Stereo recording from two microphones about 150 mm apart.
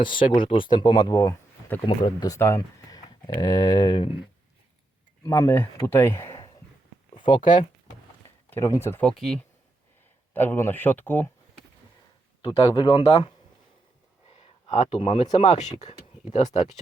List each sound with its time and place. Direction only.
0.0 s speech: 35° left (ahead or behind)
5.2 s speech: 20° left (ahead or behind)
7.3 s speech: 30° left (ahead or behind)
8.4 s speech: 20° left (ahead or behind)
10.3 s speech: 15° left (ahead or behind)
12.4 s speech: 35° left (ahead or behind)
14.3 s speech: 45° left (ahead or behind)